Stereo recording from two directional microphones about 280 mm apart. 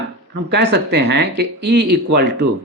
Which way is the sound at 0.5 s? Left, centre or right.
Right.